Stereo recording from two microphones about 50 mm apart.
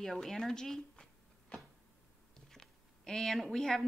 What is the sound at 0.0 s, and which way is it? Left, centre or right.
A woman's voice, centre.